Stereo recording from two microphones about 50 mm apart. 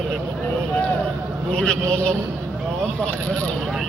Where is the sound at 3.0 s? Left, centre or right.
Left.